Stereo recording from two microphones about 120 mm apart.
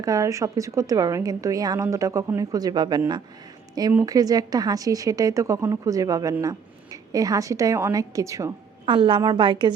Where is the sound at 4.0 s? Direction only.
30° right (ahead or behind).